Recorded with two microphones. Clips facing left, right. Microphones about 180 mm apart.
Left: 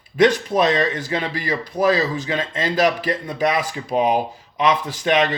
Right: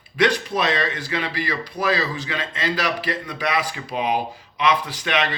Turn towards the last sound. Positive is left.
turn(degrees=45)  # may be behind; listen again after turning